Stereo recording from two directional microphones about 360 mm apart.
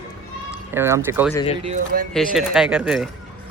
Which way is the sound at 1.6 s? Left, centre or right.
Centre.